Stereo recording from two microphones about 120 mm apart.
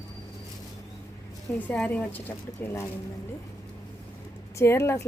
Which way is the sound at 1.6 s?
15° left (ahead or behind).